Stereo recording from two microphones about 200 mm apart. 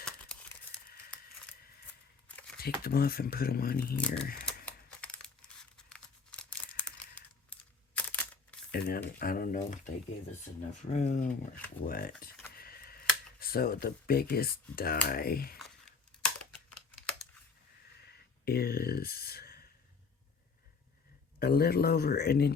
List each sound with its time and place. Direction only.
2.2 s a sound: 5° left (ahead or behind)
2.6 s speech: 50° left (ahead or behind)
3.9 s speech: 5° left (ahead or behind)
4.4 s a sound: 5° left (ahead or behind)
5.7 s crumpling: 5° left (ahead or behind)
7.5 s a sound: 5° left (ahead or behind)
7.9 s camera: 5° left (ahead or behind)
8.7 s speech: 55° left (ahead or behind)
12.5 s tick: 50° left (ahead or behind)
13.4 s speech: 50° left (ahead or behind)
18.0 s a sound: 50° left (ahead or behind)
21.3 s speech: 50° left (ahead or behind)